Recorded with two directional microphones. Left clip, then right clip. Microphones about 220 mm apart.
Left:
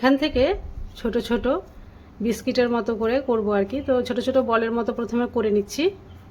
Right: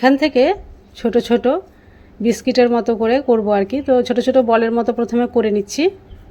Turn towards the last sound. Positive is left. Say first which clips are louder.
# right 5 dB
turn(degrees=-25)  # may be behind; listen again after turning